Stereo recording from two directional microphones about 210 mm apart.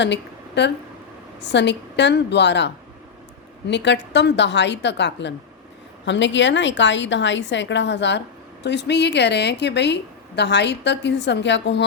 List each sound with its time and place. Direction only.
0.0 s a woman's voice: 55° left (ahead or behind)